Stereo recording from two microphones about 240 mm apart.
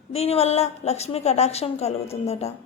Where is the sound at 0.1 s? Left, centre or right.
Left.